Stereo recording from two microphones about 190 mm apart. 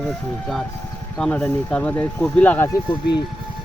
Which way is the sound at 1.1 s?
5° left (ahead or behind).